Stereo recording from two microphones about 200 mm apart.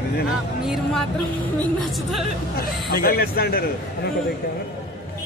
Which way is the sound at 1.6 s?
Centre (ahead or behind).